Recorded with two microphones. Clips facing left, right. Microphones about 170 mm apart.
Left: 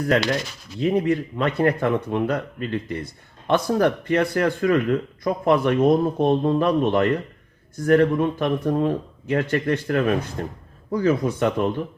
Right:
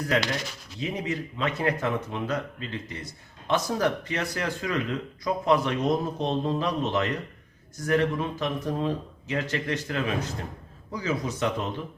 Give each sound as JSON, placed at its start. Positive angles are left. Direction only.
{"t": 0.8, "sound": "speech", "side_deg": 55}